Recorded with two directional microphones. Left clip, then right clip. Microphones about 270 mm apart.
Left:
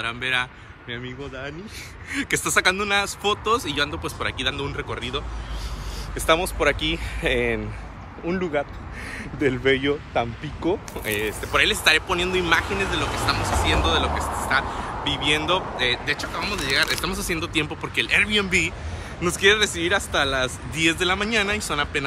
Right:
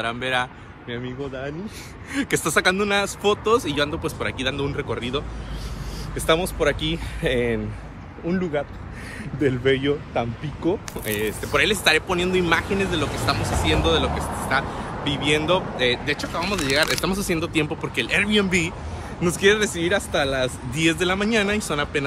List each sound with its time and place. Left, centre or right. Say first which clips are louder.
0.0 s speech: right 1 dB; centre
6.1 s speech: even; centre; by 10.8 s left
11.1 s speech: even; centre
14.7 s speech: left 1 dB; centre
15.0 s speech: right 1 dB; centre